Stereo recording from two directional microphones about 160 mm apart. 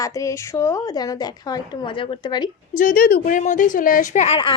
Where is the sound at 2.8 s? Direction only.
60° left (ahead or behind); by 4.4 s 45° left (ahead or behind).